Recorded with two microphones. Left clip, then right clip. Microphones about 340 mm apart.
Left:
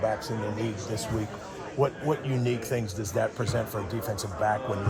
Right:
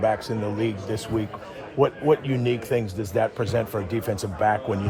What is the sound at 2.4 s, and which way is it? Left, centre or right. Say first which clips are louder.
Speech: right 7 dB; right.